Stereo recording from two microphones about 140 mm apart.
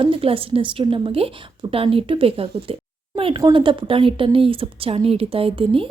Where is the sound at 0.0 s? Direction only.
40° right (ahead or behind).